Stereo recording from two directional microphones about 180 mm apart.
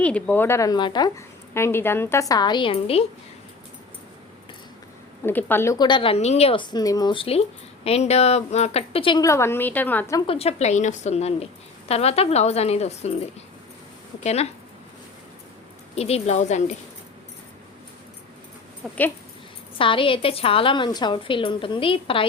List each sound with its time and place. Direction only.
0.0 s a woman's voice: 10° left (ahead or behind); by 3.1 s 35° left (ahead or behind)
5.2 s a woman's voice: 10° left (ahead or behind); by 9.2 s 30° left (ahead or behind)
9.2 s a woman's voice: 15° left (ahead or behind)
10.2 s a woman's voice: 35° left (ahead or behind)
16.0 s a woman's voice: 35° left (ahead or behind)
18.8 s speech: 5° left (ahead or behind)
19.8 s a woman's voice: 30° left (ahead or behind)